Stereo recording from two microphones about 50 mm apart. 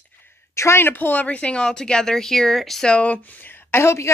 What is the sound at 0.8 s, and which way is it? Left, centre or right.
Speech, left.